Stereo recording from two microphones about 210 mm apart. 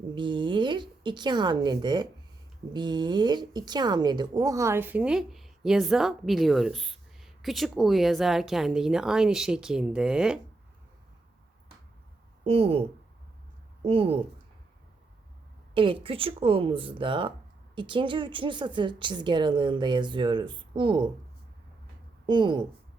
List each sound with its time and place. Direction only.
0.1 s speech: 20° right (ahead or behind); by 10.4 s 5° right (ahead or behind)
12.5 s a woman's voice: 25° right (ahead or behind)
13.8 s a woman's voice: 25° right (ahead or behind)
15.7 s a woman's voice: 25° right (ahead or behind)
22.3 s a woman's voice: 20° right (ahead or behind)